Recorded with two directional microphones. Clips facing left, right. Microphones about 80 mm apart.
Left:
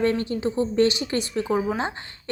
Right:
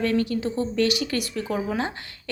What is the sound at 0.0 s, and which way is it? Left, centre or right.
A woman's voice, left.